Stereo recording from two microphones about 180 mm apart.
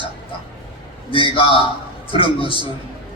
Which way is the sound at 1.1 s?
30° left (ahead or behind).